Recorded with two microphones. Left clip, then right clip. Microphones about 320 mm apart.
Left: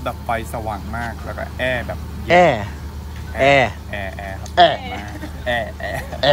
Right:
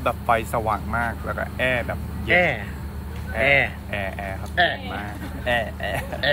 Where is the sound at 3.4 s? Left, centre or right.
Centre.